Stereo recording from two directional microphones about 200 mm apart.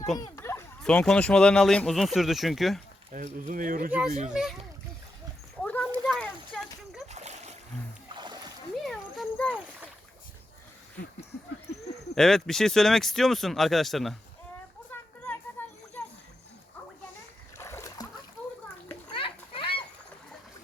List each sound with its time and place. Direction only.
0.2 s speech: 15° left (ahead or behind)
3.1 s speech: 40° right (ahead or behind)
4.3 s speech: 5° right (ahead or behind)
5.6 s a sound: 5° left (ahead or behind)
7.1 s splash: 35° right (ahead or behind)
8.1 s splash: 20° right (ahead or behind)
8.8 s a sound: centre (ahead or behind)
12.1 s speech: centre (ahead or behind)
14.8 s children playing: 10° left (ahead or behind)
17.6 s splash: 15° left (ahead or behind)
18.4 s a sound: 5° left (ahead or behind)
19.1 s splash: 25° left (ahead or behind)